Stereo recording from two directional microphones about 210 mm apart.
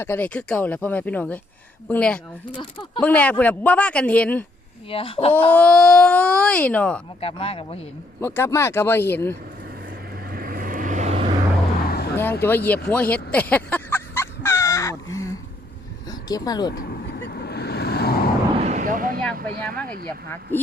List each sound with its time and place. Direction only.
0.0 s a man's voice: 10° left (ahead or behind)
4.9 s speech: 25° left (ahead or behind)
5.5 s speech: 5° left (ahead or behind)
7.2 s speech: 25° left (ahead or behind)
8.2 s a man's voice: 10° left (ahead or behind)
10.2 s vehicle: 45° right (ahead or behind)
11.9 s vehicle: 50° left (ahead or behind)
12.1 s speech: 10° left (ahead or behind)
12.9 s music: 5° left (ahead or behind)
16.0 s speech: 20° left (ahead or behind)
16.7 s vehicle: 50° left (ahead or behind)
18.5 s artillery fire: 35° right (ahead or behind)
19.4 s speech: 45° right (ahead or behind)
20.5 s a man's voice: 10° left (ahead or behind)